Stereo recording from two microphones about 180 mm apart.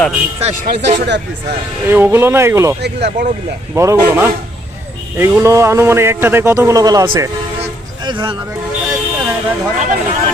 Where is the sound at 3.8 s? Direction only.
15° right (ahead or behind).